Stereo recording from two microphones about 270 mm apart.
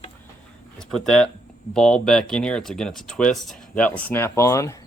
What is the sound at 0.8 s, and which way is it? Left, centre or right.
Speech, centre.